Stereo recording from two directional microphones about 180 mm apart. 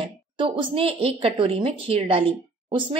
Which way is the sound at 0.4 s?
30° right (ahead or behind).